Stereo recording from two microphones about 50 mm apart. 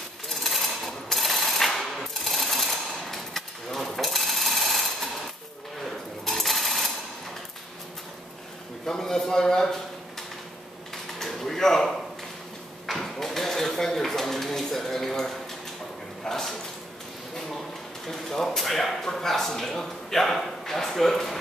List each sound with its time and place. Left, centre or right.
0.3 s sewing machine: centre
6.2 s sewing machine: centre
8.8 s a man's voice: centre
11.1 s a sound: centre